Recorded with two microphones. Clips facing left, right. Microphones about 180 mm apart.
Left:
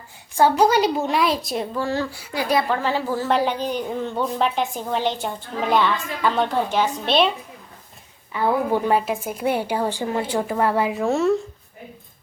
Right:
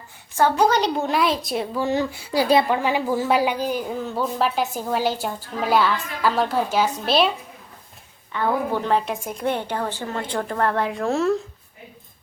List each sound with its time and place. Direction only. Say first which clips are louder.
0.6 s a woman's voice: left 2 dB; 10° left (ahead or behind)
1.8 s a child's voice: right 2 dB; 20° right (ahead or behind)
2.6 s a woman's voice: right 1 dB; 15° right (ahead or behind)
8.3 s a woman's voice: left 2 dB; 10° left (ahead or behind)